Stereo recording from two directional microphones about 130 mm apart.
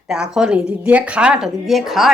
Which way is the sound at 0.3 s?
5° right (ahead or behind).